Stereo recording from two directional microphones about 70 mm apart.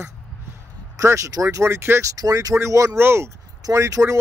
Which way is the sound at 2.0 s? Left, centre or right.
Right.